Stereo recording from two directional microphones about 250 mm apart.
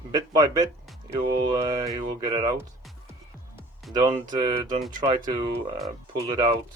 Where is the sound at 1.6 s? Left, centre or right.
Centre.